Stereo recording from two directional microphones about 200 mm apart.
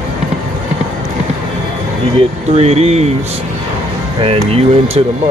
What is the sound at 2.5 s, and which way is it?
Speech, 30° right (ahead or behind).